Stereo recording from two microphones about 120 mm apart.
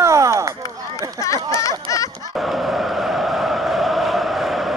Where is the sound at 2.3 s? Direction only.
Centre (ahead or behind).